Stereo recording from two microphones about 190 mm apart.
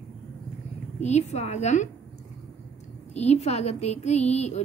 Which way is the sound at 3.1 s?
35° left (ahead or behind).